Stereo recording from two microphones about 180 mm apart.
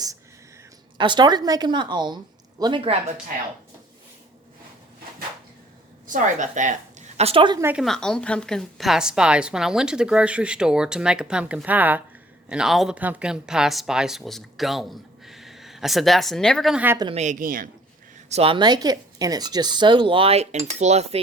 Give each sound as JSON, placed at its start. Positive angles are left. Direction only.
{"t": 0.9, "sound": "speech", "side_deg": -25}
{"t": 6.1, "sound": "speech", "side_deg": -45}
{"t": 7.2, "sound": "a woman's voice", "side_deg": -30}
{"t": 7.6, "sound": "speech", "side_deg": -10}
{"t": 7.9, "sound": "speech", "side_deg": 5}
{"t": 17.2, "sound": "speech", "side_deg": -45}
{"t": 18.3, "sound": "speech", "side_deg": -35}